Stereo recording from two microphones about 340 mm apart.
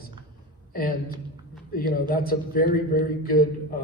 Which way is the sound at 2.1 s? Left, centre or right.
Left.